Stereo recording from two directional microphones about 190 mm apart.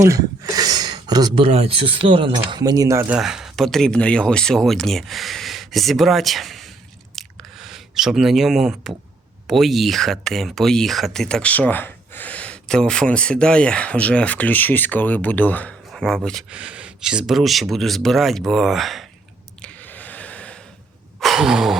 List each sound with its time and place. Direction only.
0.0 s speech: 15° right (ahead or behind)
3.2 s speech: centre (ahead or behind)
7.2 s a sound: centre (ahead or behind)
9.5 s speech: centre (ahead or behind)
19.6 s gasp: 10° left (ahead or behind)
21.2 s a sound: centre (ahead or behind)